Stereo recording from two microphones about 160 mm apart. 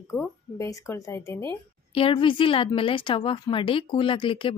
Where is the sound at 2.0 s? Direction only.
35° left (ahead or behind).